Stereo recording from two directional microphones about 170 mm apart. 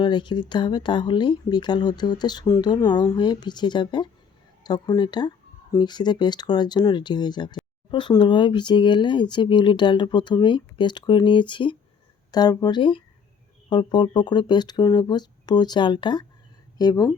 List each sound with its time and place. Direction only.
0.0 s speech: 25° left (ahead or behind)